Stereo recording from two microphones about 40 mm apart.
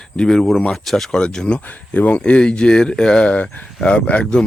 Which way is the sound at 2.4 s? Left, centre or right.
Left.